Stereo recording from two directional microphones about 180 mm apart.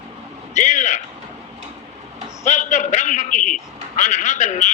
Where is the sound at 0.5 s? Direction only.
40° left (ahead or behind).